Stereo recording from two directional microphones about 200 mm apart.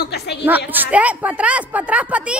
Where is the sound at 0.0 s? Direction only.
55° left (ahead or behind).